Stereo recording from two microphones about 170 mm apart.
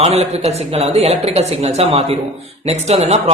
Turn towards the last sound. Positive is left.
turn(degrees=-40)  # may be behind; listen again after turning